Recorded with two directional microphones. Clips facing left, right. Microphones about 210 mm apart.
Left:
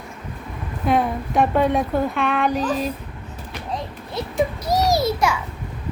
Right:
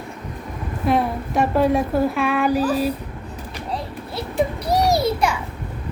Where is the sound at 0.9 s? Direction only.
Centre (ahead or behind).